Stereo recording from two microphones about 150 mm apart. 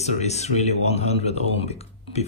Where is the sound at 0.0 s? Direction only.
50° left (ahead or behind).